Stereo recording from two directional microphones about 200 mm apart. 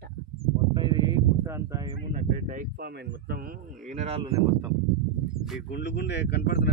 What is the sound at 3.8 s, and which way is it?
Speech, 35° right (ahead or behind).